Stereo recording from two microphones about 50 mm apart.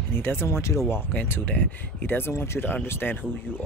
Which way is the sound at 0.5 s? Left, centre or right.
Left.